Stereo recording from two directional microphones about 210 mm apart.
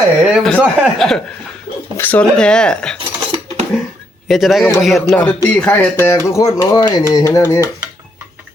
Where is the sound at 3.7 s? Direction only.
Centre (ahead or behind).